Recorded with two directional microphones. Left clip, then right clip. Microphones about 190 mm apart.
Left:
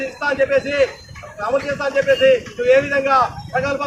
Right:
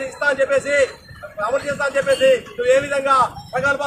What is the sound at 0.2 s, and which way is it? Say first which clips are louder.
A man's voice: even; 20° right (ahead or behind).